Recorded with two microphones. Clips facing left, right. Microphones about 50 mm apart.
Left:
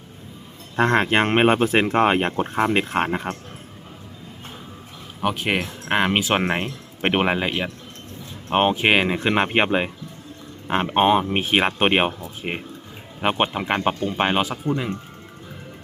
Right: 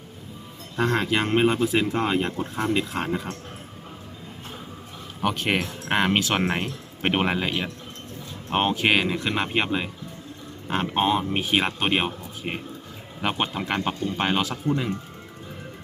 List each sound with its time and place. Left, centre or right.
0.8 s speech: left
5.2 s speech: centre; by 12.1 s left
12.4 s speech: left